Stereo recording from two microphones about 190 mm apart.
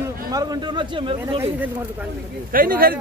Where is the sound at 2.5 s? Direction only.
50° right (ahead or behind).